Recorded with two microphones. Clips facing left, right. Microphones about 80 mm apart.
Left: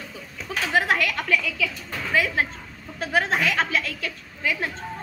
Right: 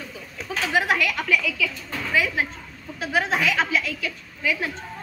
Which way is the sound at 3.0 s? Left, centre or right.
Left.